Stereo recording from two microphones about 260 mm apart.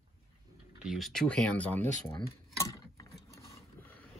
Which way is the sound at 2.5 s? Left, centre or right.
Centre.